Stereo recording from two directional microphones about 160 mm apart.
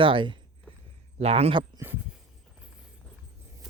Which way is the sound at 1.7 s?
15° right (ahead or behind).